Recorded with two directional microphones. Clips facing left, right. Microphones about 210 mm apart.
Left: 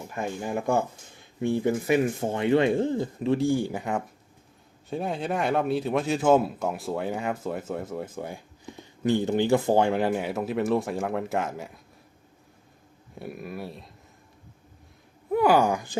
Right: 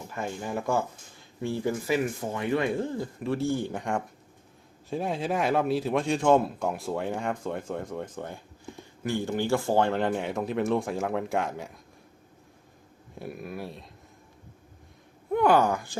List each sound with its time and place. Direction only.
0.1 s a man's voice: 15° left (ahead or behind)
9.0 s a man's voice: 20° left (ahead or behind); by 11.8 s centre (ahead or behind)
13.1 s a man's voice: centre (ahead or behind)
15.3 s speech: 5° left (ahead or behind)